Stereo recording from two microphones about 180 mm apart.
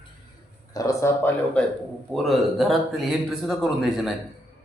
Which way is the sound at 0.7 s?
20° left (ahead or behind).